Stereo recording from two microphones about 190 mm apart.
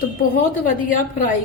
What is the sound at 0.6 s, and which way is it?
Speech, 45° left (ahead or behind).